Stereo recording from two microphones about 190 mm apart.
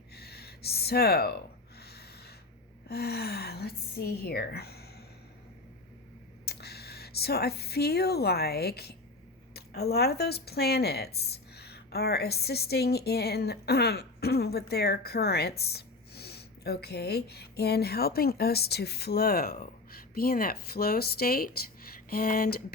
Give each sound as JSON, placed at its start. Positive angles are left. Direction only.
{"t": 0.2, "sound": "a sound", "side_deg": 55}
{"t": 2.9, "sound": "a woman's voice", "side_deg": 55}
{"t": 6.4, "sound": "a woman's voice", "side_deg": 55}